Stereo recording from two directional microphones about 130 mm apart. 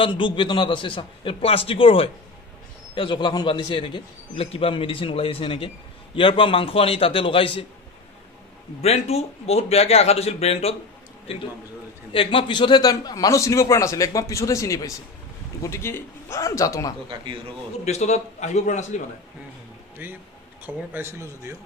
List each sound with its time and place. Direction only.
0.0 s a man's voice: 40° left (ahead or behind)
8.8 s a man's voice: 50° left (ahead or behind); by 16.9 s 25° left (ahead or behind)
17.8 s a man's voice: 60° left (ahead or behind)
20.0 s speech: 15° right (ahead or behind)